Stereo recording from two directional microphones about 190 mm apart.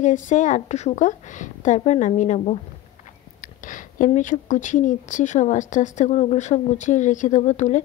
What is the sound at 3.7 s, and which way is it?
A woman's voice, 45° left (ahead or behind).